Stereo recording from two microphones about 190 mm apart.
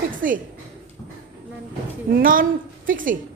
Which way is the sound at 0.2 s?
45° right (ahead or behind).